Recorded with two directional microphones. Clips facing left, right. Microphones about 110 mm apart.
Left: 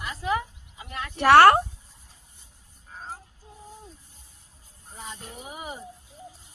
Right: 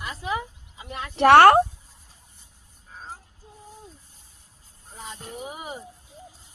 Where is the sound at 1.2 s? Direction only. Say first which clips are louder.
Right 2 dB; 55° right (ahead or behind).